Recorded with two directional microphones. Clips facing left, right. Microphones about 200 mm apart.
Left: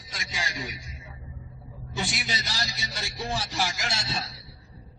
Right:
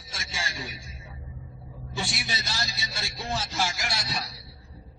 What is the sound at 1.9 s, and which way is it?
A man's voice, 20° left (ahead or behind).